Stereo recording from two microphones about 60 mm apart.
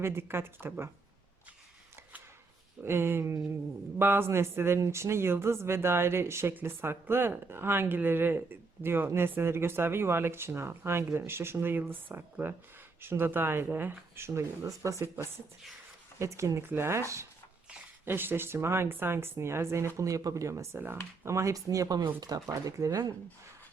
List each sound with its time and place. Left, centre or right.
0.0 s speech: right
2.8 s speech: right
14.6 s speech: right
15.0 s speech: right
16.6 s speech: right
18.0 s speech: right
20.0 s speech: right
20.7 s speech: right
21.2 s speech: right